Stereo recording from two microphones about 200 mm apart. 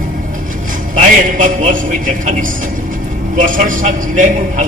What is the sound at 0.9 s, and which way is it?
Speech, 40° right (ahead or behind).